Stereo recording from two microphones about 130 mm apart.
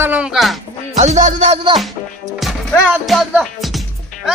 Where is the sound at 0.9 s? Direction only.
65° right (ahead or behind).